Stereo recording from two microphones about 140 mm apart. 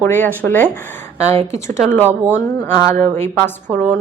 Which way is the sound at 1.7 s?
15° left (ahead or behind).